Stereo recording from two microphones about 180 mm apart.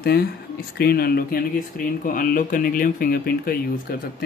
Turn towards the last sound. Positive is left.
turn(degrees=55)  # may be behind; listen again after turning